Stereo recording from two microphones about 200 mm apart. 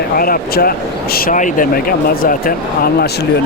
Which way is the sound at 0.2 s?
45° left (ahead or behind).